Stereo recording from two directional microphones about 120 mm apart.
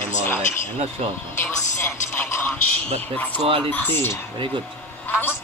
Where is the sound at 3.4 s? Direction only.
50° right (ahead or behind).